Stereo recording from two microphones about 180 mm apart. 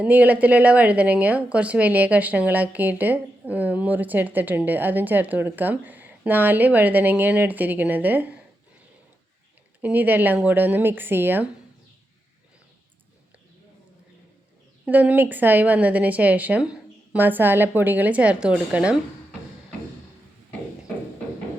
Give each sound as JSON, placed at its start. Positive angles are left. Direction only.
{"t": 0.0, "sound": "speech", "side_deg": -10}
{"t": 9.8, "sound": "speech", "side_deg": -10}
{"t": 14.8, "sound": "speech", "side_deg": -10}